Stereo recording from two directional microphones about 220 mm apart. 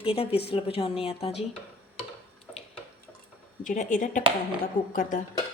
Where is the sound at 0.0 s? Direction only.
25° left (ahead or behind).